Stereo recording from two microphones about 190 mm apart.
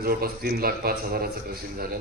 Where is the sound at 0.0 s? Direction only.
50° right (ahead or behind).